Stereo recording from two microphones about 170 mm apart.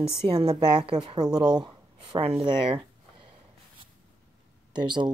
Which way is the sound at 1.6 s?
35° right (ahead or behind).